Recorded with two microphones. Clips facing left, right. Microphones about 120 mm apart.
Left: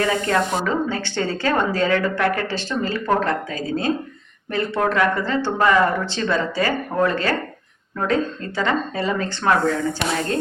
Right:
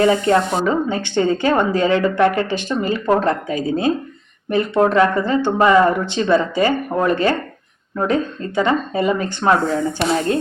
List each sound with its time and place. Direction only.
0.0 s speech: 20° right (ahead or behind)